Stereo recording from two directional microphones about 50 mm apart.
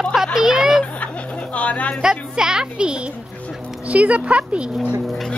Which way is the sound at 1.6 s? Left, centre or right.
Left.